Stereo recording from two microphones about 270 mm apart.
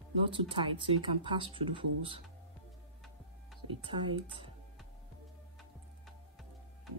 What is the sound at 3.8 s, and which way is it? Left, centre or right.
Speech, centre.